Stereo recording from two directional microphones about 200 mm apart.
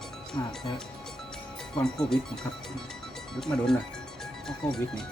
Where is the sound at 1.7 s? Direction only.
5° left (ahead or behind).